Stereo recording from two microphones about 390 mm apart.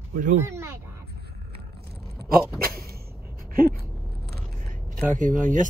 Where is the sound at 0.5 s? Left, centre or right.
Centre.